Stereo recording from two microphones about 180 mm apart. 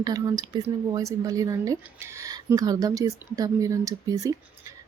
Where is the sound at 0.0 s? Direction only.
20° right (ahead or behind).